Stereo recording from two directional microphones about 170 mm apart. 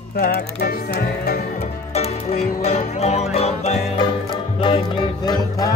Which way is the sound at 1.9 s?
40° left (ahead or behind).